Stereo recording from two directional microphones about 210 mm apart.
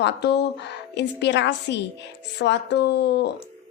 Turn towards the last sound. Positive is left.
turn(degrees=50)  # may be behind; listen again after turning